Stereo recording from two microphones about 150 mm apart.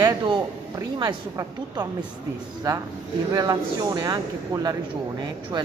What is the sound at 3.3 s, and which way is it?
Speech, 25° right (ahead or behind).